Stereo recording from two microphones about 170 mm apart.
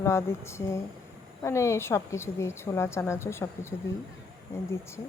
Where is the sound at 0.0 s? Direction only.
15° left (ahead or behind).